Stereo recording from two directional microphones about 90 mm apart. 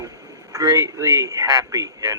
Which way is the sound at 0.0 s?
40° right (ahead or behind).